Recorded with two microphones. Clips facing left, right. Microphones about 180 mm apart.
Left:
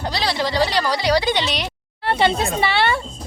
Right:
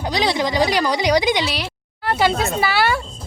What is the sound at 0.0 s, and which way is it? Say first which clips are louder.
Speech: right 3 dB; 15° right (ahead or behind).